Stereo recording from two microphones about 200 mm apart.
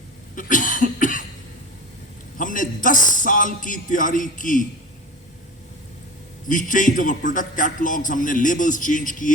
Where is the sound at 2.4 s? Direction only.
40° left (ahead or behind).